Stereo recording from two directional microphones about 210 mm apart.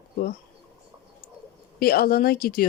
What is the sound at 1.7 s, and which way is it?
Speech, 45° left (ahead or behind).